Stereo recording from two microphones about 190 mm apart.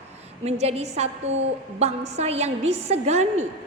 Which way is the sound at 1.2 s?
80° right.